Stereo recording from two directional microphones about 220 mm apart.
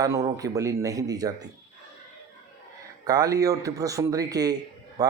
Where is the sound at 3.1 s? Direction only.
15° right (ahead or behind).